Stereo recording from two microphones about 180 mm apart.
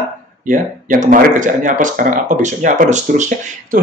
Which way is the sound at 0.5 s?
45° right (ahead or behind).